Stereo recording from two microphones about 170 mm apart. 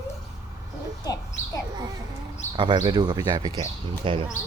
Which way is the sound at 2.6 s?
25° right (ahead or behind).